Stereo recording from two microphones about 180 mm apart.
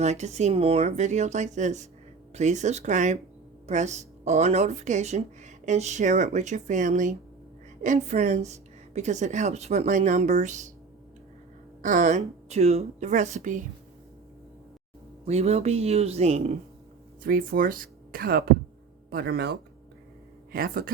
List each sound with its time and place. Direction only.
0.0 s speech: 40° right (ahead or behind)
11.8 s speech: 45° right (ahead or behind)
15.3 s speech: 35° right (ahead or behind)
17.2 s speech: 50° right (ahead or behind)